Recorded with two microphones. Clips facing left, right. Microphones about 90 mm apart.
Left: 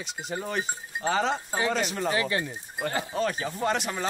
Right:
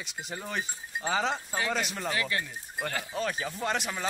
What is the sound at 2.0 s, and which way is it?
Speech, 25° left (ahead or behind).